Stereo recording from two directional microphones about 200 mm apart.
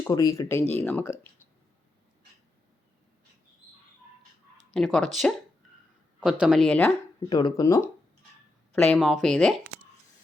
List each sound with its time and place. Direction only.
0.0 s speech: 20° left (ahead or behind)
4.7 s speech: centre (ahead or behind)
6.4 s speech: centre (ahead or behind)
7.3 s speech: 20° left (ahead or behind)
8.7 s speech: 5° left (ahead or behind)